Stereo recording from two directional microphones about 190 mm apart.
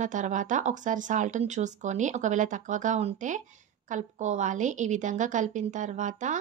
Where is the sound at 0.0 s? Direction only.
40° right (ahead or behind).